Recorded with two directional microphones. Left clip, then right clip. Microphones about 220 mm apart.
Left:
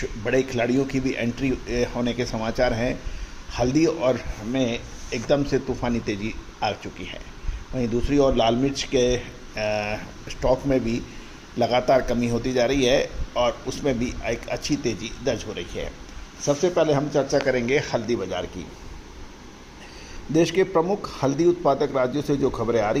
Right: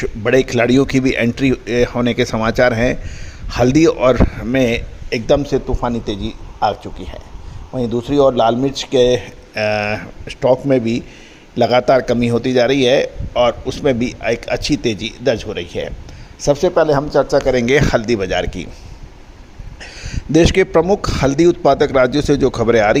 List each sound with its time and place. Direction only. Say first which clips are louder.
0.0 s a man's voice: right 9 dB; 45° right (ahead or behind)
5.4 s a man's voice: right 6 dB; 25° right (ahead or behind); by 18.6 s 50° right (ahead or behind)
20.3 s a man's voice: right 8 dB; 45° right (ahead or behind)